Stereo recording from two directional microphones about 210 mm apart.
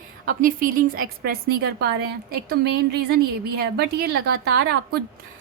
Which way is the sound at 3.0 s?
50° right (ahead or behind).